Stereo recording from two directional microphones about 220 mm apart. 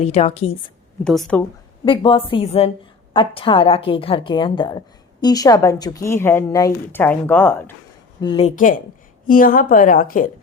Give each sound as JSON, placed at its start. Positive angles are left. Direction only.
{"t": 0.0, "sound": "a woman's voice", "side_deg": 30}
{"t": 1.0, "sound": "speech", "side_deg": 0}
{"t": 1.8, "sound": "a woman's voice", "side_deg": 20}
{"t": 8.2, "sound": "a woman's voice", "side_deg": 25}